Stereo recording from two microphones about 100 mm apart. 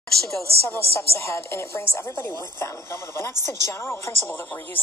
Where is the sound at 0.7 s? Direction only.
25° left (ahead or behind).